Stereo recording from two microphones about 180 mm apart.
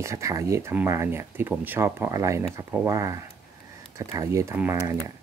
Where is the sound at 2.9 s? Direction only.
15° right (ahead or behind).